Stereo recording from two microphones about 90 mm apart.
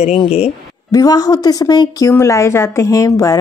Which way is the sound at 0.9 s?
45° left (ahead or behind).